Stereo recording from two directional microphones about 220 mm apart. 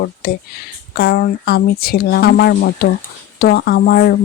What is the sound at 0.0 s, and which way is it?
Speech, 45° left (ahead or behind).